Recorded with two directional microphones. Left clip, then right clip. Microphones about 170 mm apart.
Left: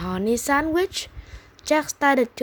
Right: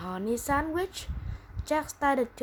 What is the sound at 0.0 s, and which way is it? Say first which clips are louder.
A woman's voice: left 8 dB; 50° left (ahead or behind).